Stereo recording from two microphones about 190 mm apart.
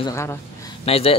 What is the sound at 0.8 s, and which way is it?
Speech, 30° left (ahead or behind).